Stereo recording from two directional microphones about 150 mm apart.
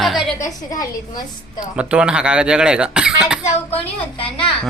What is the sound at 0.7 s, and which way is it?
Speech, 25° left (ahead or behind).